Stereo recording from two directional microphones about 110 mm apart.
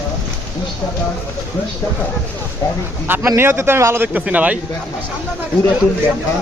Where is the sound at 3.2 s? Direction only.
20° right (ahead or behind).